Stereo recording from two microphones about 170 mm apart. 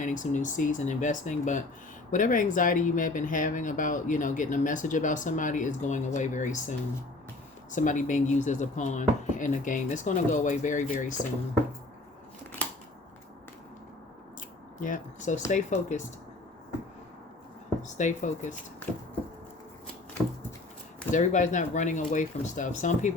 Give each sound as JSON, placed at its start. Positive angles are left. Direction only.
{"t": 0.0, "sound": "speech", "side_deg": 50}
{"t": 14.8, "sound": "speech", "side_deg": 50}
{"t": 17.8, "sound": "speech", "side_deg": 45}
{"t": 21.1, "sound": "speech", "side_deg": 45}